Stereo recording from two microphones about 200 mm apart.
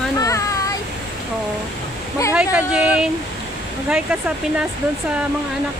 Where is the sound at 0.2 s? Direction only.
15° left (ahead or behind).